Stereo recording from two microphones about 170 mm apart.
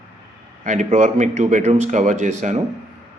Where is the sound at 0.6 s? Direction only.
45° right (ahead or behind).